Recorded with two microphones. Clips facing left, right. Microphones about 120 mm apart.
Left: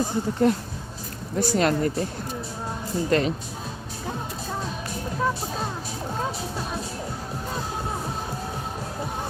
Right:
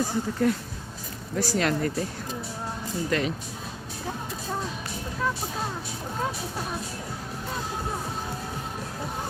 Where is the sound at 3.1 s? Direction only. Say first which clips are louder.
Left 5 dB; 35° left (ahead or behind).